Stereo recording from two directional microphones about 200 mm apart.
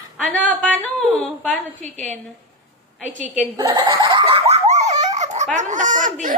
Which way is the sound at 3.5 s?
25° right (ahead or behind).